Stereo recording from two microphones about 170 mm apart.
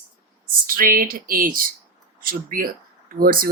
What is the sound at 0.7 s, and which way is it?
Speech, 55° right (ahead or behind).